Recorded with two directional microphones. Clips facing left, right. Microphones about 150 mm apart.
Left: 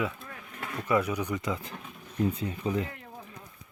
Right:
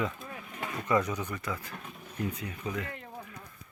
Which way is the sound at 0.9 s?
10° left (ahead or behind).